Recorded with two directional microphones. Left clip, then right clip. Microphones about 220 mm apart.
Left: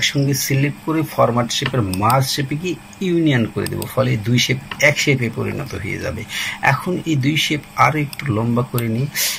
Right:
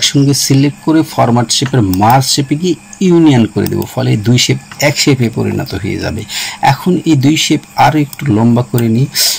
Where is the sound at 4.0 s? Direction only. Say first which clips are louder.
Right 4 dB; 60° right (ahead or behind).